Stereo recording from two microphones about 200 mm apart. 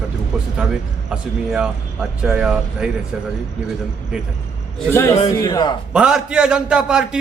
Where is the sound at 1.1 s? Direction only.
5° right (ahead or behind).